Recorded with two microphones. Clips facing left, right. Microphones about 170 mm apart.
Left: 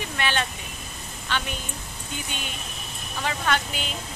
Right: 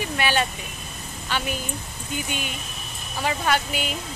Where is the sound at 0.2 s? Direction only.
10° right (ahead or behind).